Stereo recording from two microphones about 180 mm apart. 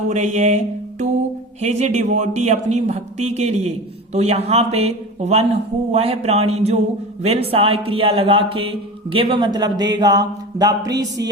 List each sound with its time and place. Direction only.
0.1 s music: 40° right (ahead or behind)
1.6 s a man's voice: 40° right (ahead or behind); by 11.0 s 20° right (ahead or behind)